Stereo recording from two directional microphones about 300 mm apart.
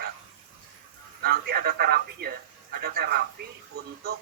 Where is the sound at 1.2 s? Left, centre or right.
Right.